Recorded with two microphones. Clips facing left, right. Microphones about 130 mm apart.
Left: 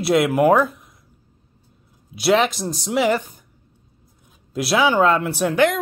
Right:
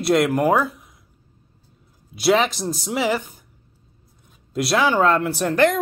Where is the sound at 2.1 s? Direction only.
Centre (ahead or behind).